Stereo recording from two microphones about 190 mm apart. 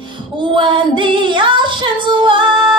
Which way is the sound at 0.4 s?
25° right (ahead or behind).